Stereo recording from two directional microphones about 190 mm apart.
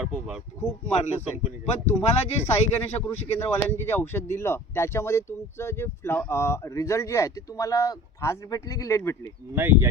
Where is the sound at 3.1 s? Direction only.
10° left (ahead or behind).